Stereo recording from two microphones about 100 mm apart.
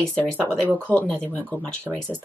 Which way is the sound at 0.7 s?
20° right (ahead or behind).